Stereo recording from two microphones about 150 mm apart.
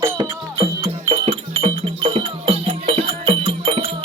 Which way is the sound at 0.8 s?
45° right (ahead or behind).